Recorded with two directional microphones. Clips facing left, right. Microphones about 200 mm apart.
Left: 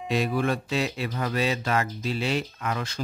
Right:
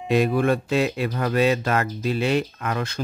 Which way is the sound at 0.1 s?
55° right (ahead or behind).